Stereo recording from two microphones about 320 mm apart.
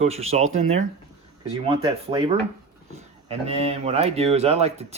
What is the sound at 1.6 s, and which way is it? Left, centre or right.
Speech, centre.